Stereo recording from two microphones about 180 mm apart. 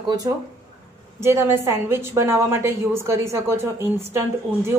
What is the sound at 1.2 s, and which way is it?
A woman's voice, 15° right (ahead or behind).